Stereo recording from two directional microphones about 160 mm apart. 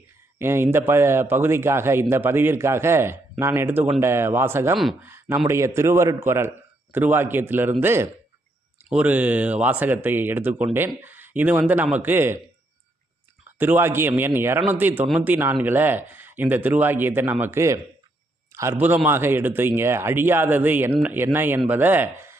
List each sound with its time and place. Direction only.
0.3 s a man's voice: 15° right (ahead or behind)
13.6 s a man's voice: 15° right (ahead or behind)